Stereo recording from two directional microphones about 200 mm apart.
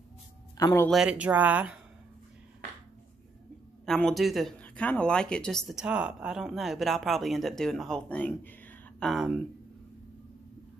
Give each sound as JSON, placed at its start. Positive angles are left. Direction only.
{"t": 0.6, "sound": "speech", "side_deg": 15}
{"t": 0.8, "sound": "speech", "side_deg": -5}
{"t": 3.8, "sound": "speech", "side_deg": 0}